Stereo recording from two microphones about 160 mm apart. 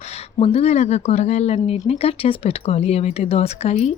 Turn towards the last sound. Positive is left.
turn(degrees=40)  # may be behind; listen again after turning